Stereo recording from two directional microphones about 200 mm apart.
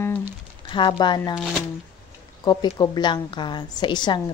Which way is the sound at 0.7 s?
25° left (ahead or behind).